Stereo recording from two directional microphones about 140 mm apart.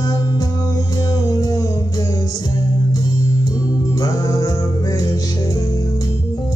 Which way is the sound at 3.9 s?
25° left (ahead or behind).